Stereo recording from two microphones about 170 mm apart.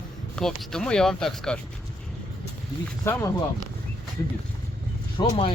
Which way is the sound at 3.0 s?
15° left (ahead or behind).